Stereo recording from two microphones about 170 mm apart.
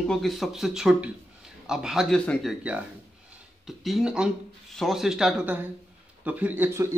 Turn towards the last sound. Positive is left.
turn(degrees=-15)  # may be behind; listen again after turning